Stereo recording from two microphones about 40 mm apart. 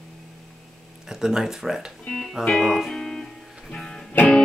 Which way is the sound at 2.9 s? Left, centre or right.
Centre.